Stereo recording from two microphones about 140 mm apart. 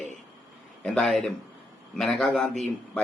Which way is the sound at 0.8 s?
Centre (ahead or behind).